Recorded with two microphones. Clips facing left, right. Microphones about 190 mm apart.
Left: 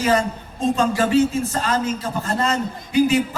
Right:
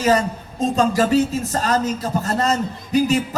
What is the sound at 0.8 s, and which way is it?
A man's voice, 40° right (ahead or behind).